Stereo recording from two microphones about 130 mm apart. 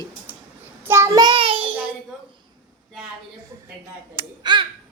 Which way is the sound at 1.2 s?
40° right (ahead or behind).